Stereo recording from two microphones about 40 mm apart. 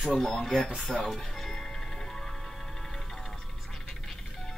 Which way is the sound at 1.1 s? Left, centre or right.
Centre.